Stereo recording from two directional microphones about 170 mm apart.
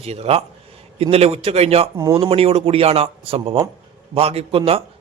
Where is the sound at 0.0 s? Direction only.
35° right (ahead or behind).